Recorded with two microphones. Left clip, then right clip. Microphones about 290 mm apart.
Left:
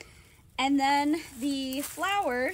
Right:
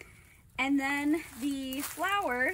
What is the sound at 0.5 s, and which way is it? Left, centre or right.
Speech, centre.